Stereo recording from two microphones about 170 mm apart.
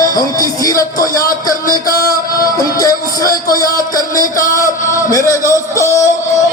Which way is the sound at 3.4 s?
20° left (ahead or behind).